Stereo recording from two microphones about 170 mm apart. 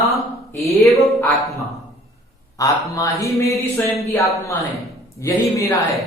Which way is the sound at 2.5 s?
20° left (ahead or behind).